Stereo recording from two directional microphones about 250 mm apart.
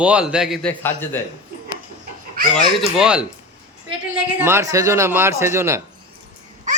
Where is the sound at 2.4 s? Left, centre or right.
Right.